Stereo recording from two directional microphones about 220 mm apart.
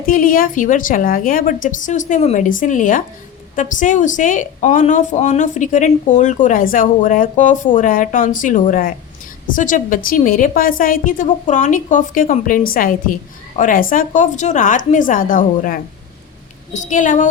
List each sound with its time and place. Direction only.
0.0 s a woman's voice: 40° left (ahead or behind)